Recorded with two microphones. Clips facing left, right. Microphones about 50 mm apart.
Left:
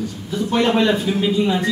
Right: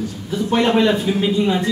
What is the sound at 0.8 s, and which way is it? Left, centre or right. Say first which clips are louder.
Speech: right 1 dB; centre.